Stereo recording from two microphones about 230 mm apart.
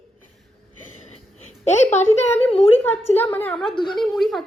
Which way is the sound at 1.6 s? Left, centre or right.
Left.